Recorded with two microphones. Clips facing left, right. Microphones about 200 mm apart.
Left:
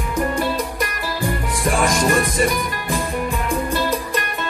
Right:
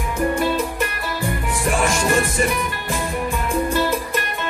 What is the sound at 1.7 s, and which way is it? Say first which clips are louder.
Music: left 2 dB; 35° left (ahead or behind).